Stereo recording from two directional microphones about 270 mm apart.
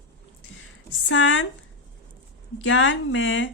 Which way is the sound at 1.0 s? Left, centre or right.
Left.